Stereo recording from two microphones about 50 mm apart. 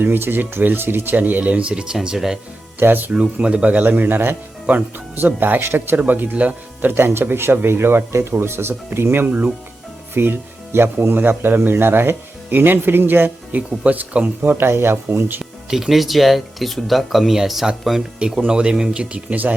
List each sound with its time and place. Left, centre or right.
0.0 s speech: right
1.7 s speech: centre
2.7 s speech: right
3.3 s speech: right
3.8 s speech: right
6.0 s speech: right
6.3 s speech: right
6.8 s speech: right
10.2 s speech: right
13.6 s speech: right
14.4 s speech: right
14.7 s speech: right
15.7 s speech: centre
18.4 s speech: centre